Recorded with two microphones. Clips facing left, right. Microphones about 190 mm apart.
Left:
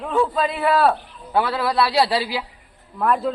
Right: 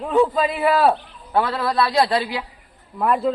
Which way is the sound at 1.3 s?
10° left (ahead or behind).